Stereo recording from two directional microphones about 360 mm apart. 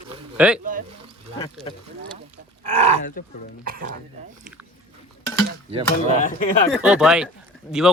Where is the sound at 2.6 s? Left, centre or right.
Centre.